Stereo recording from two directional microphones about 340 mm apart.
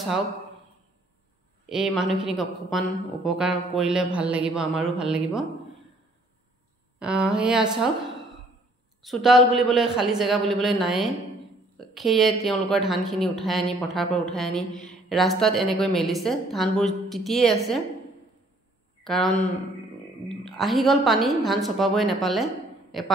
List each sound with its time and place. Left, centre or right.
1.7 s a woman's voice: centre
7.0 s a woman's voice: centre
9.0 s a woman's voice: centre
19.0 s a woman's voice: centre